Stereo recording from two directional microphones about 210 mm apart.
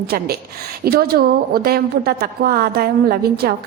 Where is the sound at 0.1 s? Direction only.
45° right (ahead or behind).